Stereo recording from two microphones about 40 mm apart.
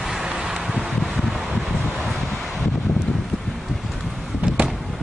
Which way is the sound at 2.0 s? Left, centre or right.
Centre.